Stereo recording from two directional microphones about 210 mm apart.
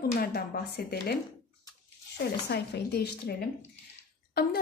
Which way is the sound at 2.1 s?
50° left (ahead or behind).